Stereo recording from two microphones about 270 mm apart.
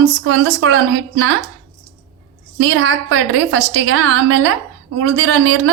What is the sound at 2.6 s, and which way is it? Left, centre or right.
A woman's voice, right.